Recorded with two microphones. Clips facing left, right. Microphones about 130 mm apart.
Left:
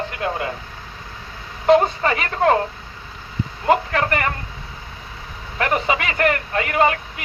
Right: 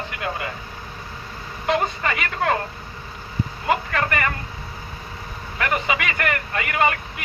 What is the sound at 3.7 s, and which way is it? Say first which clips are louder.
Speech: left 5 dB; 30° left (ahead or behind).